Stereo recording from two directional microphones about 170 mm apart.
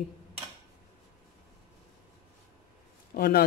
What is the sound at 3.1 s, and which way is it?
Speech, 65° left (ahead or behind).